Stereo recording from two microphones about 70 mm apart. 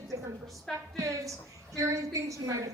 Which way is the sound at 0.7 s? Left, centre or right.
Centre.